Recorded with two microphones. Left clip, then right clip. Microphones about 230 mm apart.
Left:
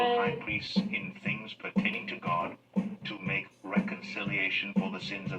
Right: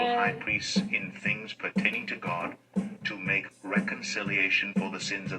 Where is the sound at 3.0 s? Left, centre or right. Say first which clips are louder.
Right 7 dB; right.